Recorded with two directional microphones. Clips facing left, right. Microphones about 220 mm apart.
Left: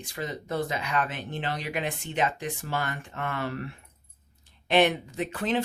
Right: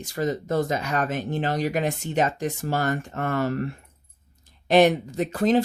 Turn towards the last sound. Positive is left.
turn(degrees=-40)  # may be behind; listen again after turning